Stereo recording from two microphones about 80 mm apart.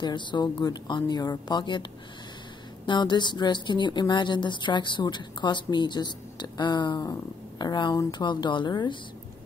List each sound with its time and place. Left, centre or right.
0.0 s a woman's voice: left
2.9 s a woman's voice: left